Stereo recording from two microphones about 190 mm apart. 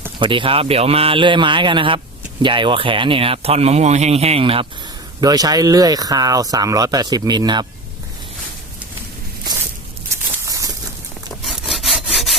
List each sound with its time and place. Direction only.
0.2 s speech: 25° right (ahead or behind)
10.4 s a sound: 20° right (ahead or behind)
11.4 s sawing: centre (ahead or behind)